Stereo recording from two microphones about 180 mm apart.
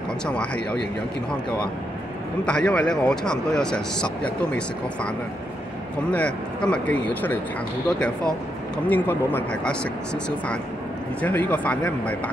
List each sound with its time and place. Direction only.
0.3 s speech: 5° left (ahead or behind)
2.4 s speech: 5° left (ahead or behind)
8.7 s speech: 10° left (ahead or behind)
11.1 s speech: 10° left (ahead or behind)